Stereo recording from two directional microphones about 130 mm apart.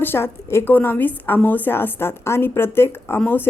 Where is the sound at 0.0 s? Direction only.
15° left (ahead or behind).